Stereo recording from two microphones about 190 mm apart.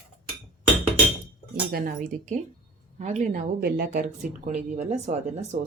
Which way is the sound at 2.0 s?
40° right (ahead or behind).